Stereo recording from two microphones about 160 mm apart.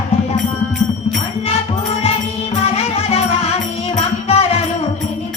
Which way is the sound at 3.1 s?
40° left (ahead or behind).